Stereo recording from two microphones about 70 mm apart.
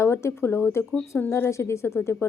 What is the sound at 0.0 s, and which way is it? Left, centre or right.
Speech, left.